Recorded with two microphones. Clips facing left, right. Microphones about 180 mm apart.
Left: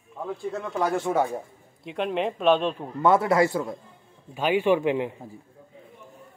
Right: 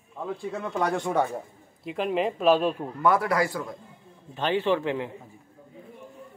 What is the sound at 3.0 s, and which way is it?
Speech, 25° left (ahead or behind).